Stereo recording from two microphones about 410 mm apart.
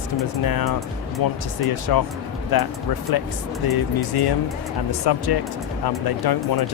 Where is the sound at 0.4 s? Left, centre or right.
Left.